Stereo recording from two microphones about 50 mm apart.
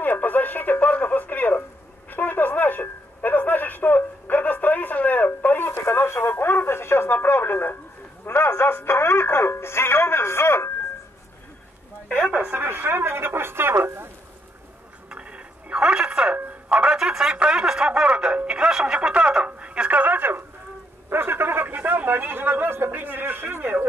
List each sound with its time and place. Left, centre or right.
0.0 s radio: left
2.0 s a sound: left
5.8 s radio: left
8.3 s music: left
12.4 s a sound: right
15.0 s telephone: right
16.6 s music: right
18.9 s radio: right
21.1 s a sound: right